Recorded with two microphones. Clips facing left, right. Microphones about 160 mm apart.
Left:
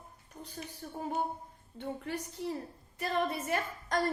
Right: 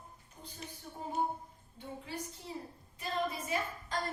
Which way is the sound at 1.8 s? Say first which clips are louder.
Left 5 dB; 65° left (ahead or behind).